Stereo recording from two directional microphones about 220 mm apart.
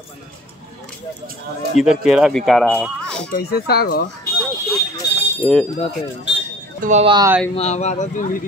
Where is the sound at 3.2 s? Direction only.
45° left (ahead or behind).